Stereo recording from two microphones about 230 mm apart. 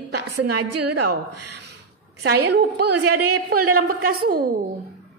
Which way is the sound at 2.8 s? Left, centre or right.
Right.